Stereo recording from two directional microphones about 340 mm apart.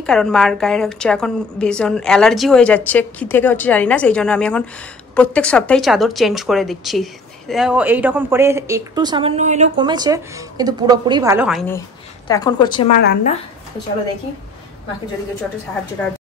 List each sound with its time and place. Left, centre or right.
0.0 s a woman's voice: centre
13.0 s speech: left
15.4 s a woman's voice: centre